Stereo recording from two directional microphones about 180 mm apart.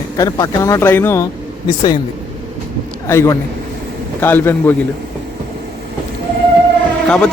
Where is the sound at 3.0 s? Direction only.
15° left (ahead or behind).